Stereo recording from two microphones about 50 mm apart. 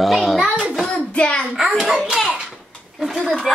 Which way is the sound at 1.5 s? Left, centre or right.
Centre.